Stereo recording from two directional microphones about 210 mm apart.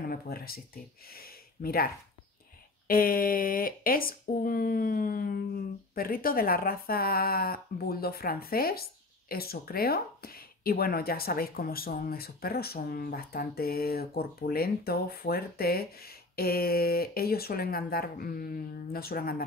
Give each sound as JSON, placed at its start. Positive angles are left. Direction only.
{"t": 0.0, "sound": "speech", "side_deg": 45}
{"t": 2.9, "sound": "speech", "side_deg": 45}